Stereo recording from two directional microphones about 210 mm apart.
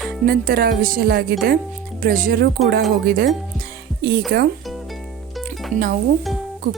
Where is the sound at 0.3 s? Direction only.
45° right (ahead or behind).